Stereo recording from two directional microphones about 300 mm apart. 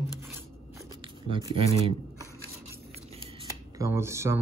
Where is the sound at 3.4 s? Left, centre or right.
Centre.